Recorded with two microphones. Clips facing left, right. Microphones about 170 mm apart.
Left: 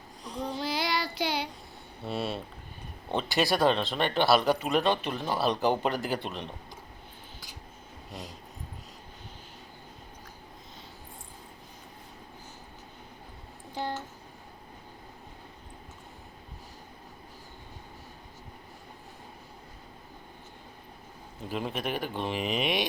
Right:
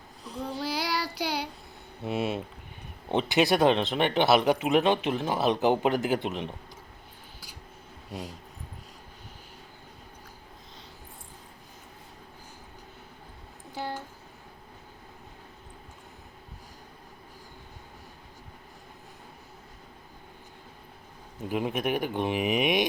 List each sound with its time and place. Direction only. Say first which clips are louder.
0.3 s child singing: even; 5° right (ahead or behind)
2.0 s speech: right 3 dB; 20° right (ahead or behind)
13.7 s a sound: left 1 dB; 5° right (ahead or behind)
21.5 s speech: right 4 dB; 15° right (ahead or behind)